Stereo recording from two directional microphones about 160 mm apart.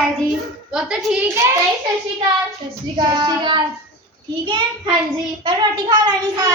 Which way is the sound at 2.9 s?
30° right (ahead or behind).